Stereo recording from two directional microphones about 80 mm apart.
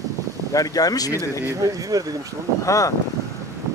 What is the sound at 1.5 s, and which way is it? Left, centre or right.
Speech, right.